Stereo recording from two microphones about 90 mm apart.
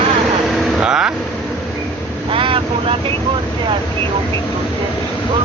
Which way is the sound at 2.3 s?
75° right (ahead or behind).